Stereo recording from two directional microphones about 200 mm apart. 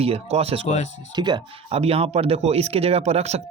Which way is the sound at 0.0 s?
30° right (ahead or behind).